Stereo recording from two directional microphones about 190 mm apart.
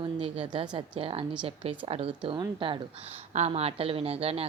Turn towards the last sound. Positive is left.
turn(degrees=-30)  # may be behind; listen again after turning